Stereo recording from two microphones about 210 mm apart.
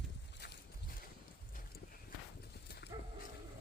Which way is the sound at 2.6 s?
50° left (ahead or behind).